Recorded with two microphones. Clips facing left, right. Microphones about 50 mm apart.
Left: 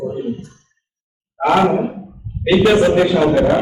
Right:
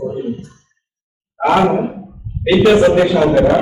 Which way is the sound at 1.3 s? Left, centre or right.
Centre.